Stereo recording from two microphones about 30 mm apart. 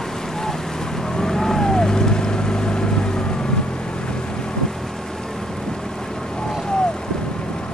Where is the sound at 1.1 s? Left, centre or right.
Centre.